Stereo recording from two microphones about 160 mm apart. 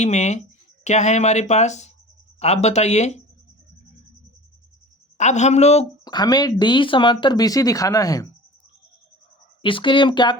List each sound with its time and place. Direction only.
0.0 s speech: 45° left (ahead or behind)
5.1 s speech: 45° left (ahead or behind)
6.1 s speech: 25° left (ahead or behind)
9.6 s speech: 30° left (ahead or behind)